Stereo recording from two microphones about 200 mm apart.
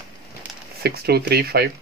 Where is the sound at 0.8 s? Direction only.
55° right (ahead or behind).